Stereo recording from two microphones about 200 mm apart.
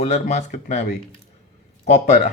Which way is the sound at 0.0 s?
35° left (ahead or behind).